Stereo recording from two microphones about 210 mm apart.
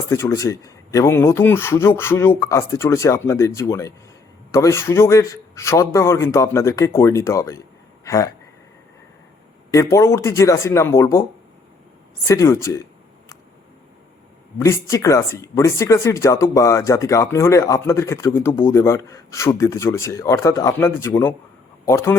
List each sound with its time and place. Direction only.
0.1 s speech: 15° left (ahead or behind)
9.7 s speech: 15° left (ahead or behind)
12.3 s speech: 15° left (ahead or behind)
14.6 s speech: 15° left (ahead or behind)